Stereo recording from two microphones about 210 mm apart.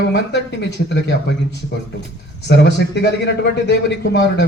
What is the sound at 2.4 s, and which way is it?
A man's voice, 55° left (ahead or behind).